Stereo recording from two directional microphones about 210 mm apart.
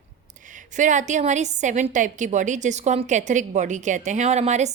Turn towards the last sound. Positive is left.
turn(degrees=-30)  # may be behind; listen again after turning